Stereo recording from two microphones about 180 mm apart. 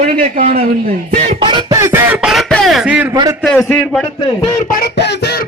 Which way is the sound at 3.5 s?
5° left (ahead or behind).